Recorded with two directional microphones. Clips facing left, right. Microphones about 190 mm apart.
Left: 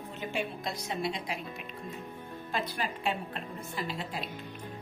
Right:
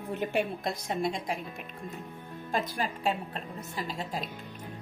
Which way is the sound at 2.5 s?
45° right (ahead or behind).